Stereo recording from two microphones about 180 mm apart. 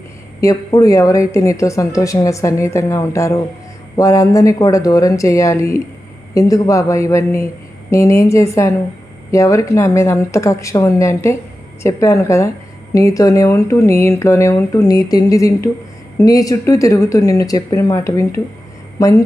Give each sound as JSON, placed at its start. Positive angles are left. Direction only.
{"t": 0.4, "sound": "a woman's voice", "side_deg": 20}